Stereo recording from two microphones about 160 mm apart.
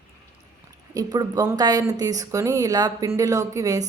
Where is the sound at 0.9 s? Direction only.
25° right (ahead or behind).